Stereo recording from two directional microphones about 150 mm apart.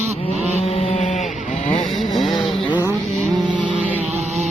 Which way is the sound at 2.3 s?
30° left (ahead or behind).